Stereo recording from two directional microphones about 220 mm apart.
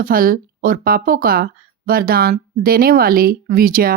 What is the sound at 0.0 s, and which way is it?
Speech, 40° right (ahead or behind).